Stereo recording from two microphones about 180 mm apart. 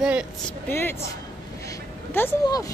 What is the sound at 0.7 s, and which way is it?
Speech, 10° left (ahead or behind).